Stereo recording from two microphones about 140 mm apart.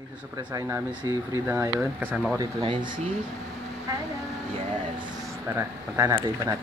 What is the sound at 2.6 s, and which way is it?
Speech, 35° right (ahead or behind).